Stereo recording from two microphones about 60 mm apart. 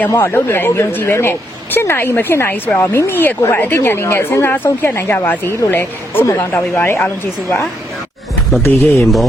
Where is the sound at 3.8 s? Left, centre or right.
Left.